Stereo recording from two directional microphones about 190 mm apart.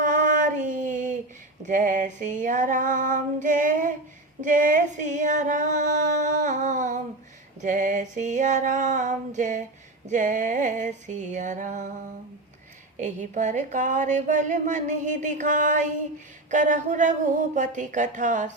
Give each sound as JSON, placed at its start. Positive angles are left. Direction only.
{"t": 0.0, "sound": "female singing", "side_deg": -45}
{"t": 1.6, "sound": "a sound", "side_deg": -40}
{"t": 10.1, "sound": "music", "side_deg": -40}
{"t": 13.0, "sound": "a woman's voice", "side_deg": -40}